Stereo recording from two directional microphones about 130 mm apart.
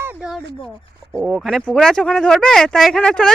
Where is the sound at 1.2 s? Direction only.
Centre (ahead or behind).